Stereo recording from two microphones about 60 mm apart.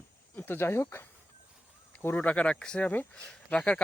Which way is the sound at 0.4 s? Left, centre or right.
Left.